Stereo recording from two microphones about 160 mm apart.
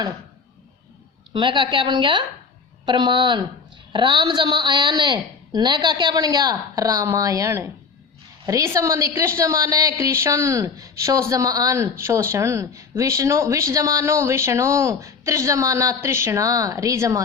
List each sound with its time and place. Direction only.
1.3 s a woman's voice: 30° right (ahead or behind)